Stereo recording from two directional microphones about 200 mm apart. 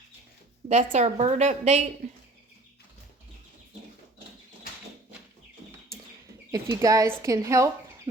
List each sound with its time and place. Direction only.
0.7 s a woman's voice: 35° right (ahead or behind)
6.5 s speech: 15° right (ahead or behind)